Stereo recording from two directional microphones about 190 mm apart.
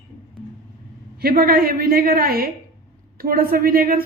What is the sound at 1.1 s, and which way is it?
Speech, 55° right (ahead or behind).